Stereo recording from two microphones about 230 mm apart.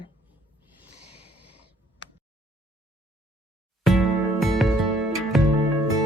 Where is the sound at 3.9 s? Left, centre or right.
Centre.